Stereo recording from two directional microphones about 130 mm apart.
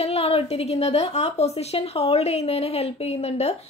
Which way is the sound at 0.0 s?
50° left (ahead or behind).